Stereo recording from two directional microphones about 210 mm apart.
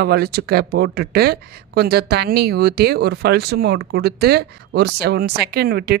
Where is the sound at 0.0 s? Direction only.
50° right (ahead or behind).